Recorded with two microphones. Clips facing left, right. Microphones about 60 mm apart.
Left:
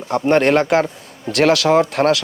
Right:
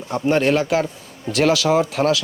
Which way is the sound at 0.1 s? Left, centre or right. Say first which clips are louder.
Left 3 dB; left.